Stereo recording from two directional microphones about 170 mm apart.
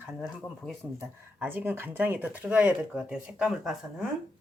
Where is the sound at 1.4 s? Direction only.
10° right (ahead or behind).